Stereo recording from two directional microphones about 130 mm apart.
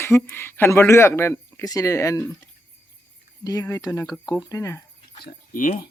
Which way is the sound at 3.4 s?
25° left (ahead or behind).